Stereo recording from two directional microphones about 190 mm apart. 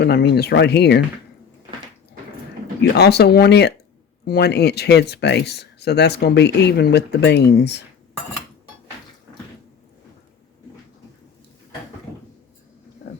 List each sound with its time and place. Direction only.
0.0 s speech: 60° left (ahead or behind)
3.0 s speech: 60° left (ahead or behind)